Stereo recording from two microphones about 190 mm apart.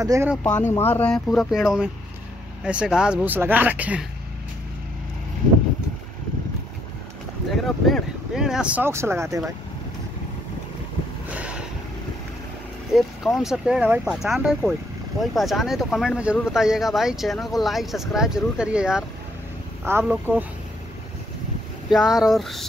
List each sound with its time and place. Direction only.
0.0 s speech: 15° right (ahead or behind)
0.4 s speech: 10° left (ahead or behind); by 4.0 s 10° right (ahead or behind)
7.5 s speech: centre (ahead or behind)
11.2 s boat: 5° right (ahead or behind)
12.9 s speech: centre (ahead or behind)
21.9 s speech: centre (ahead or behind)